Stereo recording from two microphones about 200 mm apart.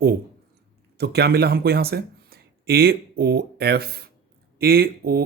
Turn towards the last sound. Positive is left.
turn(degrees=-50)  # may be behind; listen again after turning